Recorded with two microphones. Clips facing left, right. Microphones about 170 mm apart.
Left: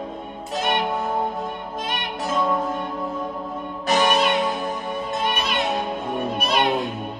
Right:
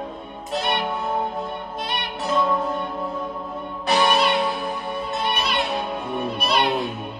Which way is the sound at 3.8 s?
45° left (ahead or behind).